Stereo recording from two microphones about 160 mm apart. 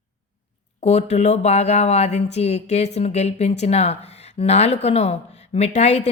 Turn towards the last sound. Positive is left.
turn(degrees=45)  # may be behind; listen again after turning